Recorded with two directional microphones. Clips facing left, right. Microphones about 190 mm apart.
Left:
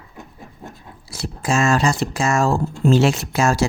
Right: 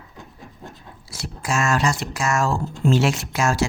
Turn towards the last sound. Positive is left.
turn(degrees=35)  # may be behind; listen again after turning